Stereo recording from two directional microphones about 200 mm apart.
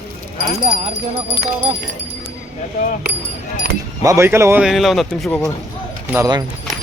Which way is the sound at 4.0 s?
15° right (ahead or behind).